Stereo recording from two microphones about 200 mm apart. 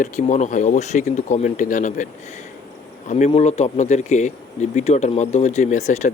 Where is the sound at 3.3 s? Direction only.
30° left (ahead or behind).